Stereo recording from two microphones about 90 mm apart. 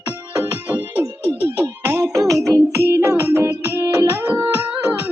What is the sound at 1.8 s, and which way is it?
Music, 30° right (ahead or behind).